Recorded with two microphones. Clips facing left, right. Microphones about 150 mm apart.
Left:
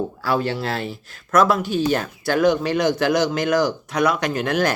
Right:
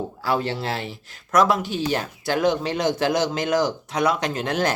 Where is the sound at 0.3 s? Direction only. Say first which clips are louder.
Left 1 dB; 25° right (ahead or behind).